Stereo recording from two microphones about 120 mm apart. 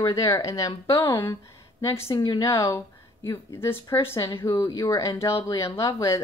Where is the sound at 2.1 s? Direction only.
35° left (ahead or behind).